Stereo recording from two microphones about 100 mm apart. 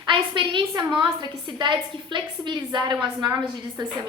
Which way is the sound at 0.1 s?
55° right (ahead or behind).